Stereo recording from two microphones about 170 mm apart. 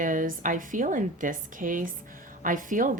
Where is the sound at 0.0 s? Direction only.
50° right (ahead or behind).